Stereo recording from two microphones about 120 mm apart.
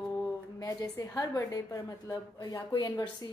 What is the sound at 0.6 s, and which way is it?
A woman's voice, 30° left (ahead or behind).